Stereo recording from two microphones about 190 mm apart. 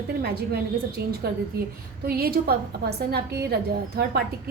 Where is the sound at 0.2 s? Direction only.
55° right (ahead or behind).